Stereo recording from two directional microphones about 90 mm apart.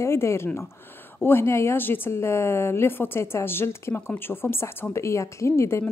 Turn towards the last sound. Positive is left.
turn(degrees=30)  # may be behind; listen again after turning